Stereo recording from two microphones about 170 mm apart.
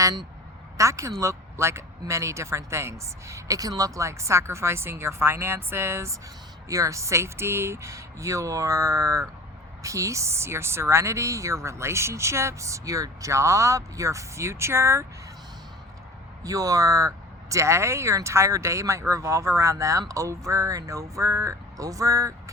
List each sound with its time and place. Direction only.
0.8 s speech: 15° right (ahead or behind)
16.4 s speech: 20° right (ahead or behind)